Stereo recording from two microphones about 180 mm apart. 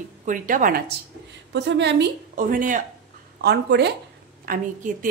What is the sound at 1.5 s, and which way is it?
Speech, 75° right (ahead or behind).